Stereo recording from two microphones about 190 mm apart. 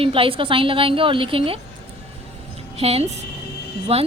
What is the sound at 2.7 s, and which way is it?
Speech, 30° right (ahead or behind).